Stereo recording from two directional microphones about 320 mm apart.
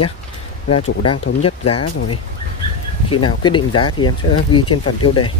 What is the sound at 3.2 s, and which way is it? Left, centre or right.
Speech, centre.